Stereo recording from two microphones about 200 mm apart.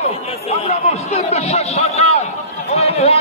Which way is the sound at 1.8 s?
30° left (ahead or behind).